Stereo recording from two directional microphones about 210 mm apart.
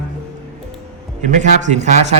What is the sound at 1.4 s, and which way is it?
Speech, 35° right (ahead or behind).